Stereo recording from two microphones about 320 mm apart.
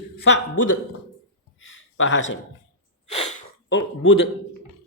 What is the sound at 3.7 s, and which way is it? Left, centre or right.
Speech, left.